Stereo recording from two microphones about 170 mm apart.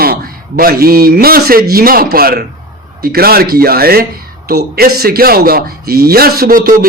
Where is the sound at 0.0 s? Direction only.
60° right (ahead or behind).